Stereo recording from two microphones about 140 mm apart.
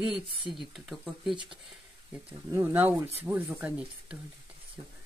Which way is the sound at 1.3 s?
35° right (ahead or behind).